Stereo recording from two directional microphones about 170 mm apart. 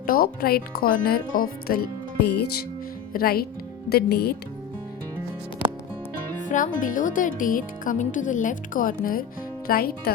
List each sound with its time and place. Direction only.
0.0 s speech: 60° left (ahead or behind)
6.7 s speech: 50° left (ahead or behind)